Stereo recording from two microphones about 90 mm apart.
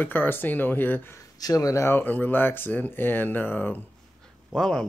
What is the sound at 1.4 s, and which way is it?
Speech, 40° left (ahead or behind).